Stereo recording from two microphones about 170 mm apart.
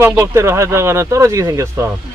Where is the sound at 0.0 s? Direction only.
15° right (ahead or behind).